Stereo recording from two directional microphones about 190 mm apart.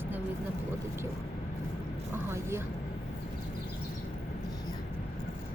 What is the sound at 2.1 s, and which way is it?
Speech, 15° right (ahead or behind).